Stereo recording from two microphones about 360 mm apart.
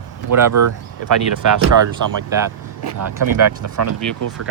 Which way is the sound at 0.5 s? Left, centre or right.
Right.